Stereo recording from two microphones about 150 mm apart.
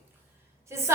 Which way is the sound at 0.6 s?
20° right (ahead or behind).